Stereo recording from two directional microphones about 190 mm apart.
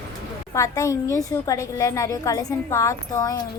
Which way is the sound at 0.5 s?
15° left (ahead or behind).